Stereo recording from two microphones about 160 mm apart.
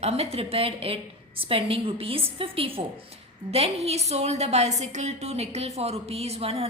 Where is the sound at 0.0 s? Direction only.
40° right (ahead or behind).